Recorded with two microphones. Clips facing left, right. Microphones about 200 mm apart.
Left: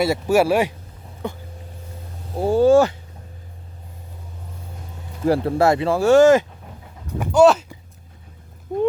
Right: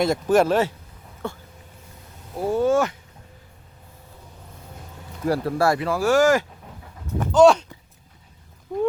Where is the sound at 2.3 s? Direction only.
30° left (ahead or behind).